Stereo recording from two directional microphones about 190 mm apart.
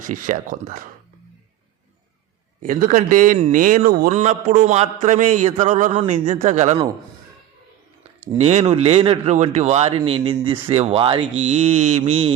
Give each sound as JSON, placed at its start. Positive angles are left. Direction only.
{"t": 0.1, "sound": "speech", "side_deg": -45}
{"t": 2.6, "sound": "a man's voice", "side_deg": -45}
{"t": 8.4, "sound": "a man's voice", "side_deg": -35}